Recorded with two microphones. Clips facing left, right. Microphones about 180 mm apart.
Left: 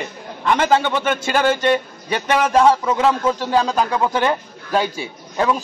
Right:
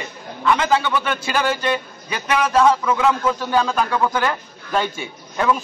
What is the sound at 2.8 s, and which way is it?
A man's voice, 25° left (ahead or behind).